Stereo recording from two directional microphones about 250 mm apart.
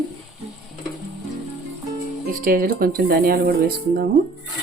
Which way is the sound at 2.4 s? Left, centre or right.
Right.